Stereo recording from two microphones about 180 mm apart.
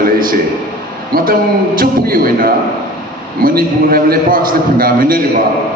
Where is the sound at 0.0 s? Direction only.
50° right (ahead or behind).